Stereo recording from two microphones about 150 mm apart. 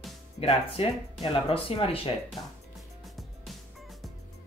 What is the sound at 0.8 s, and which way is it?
Speech, 40° left (ahead or behind).